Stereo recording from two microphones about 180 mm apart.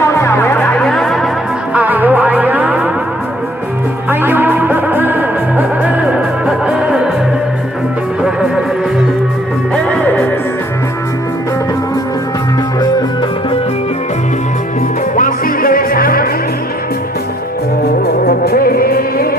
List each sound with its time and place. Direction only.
0.0 s music: 15° left (ahead or behind); by 2.9 s 5° right (ahead or behind)
4.1 s music: 10° right (ahead or behind)
8.2 s music: 5° right (ahead or behind)
9.7 s music: 5° left (ahead or behind)
15.1 s music: 50° left (ahead or behind)
17.8 s music: 60° left (ahead or behind)